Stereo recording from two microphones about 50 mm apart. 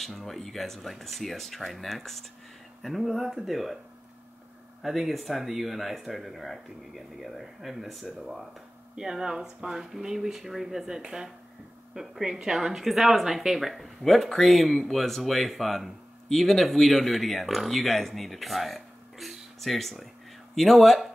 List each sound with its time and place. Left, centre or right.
0.0 s a woman's voice: centre
4.8 s a woman's voice: centre
8.9 s a woman's voice: centre